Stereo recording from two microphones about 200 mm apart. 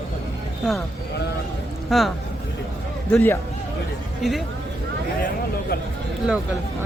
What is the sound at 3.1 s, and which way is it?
Speech, 10° left (ahead or behind).